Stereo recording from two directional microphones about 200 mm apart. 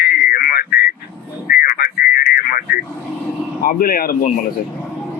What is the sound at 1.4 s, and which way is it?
Radio, 50° left (ahead or behind).